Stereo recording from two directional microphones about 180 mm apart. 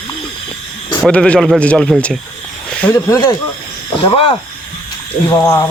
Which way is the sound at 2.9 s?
20° left (ahead or behind).